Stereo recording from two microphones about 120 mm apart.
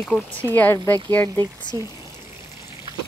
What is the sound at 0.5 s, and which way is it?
Speech, 15° left (ahead or behind).